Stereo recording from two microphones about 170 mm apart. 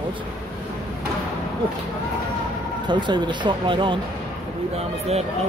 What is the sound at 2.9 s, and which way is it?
Speech, 25° right (ahead or behind).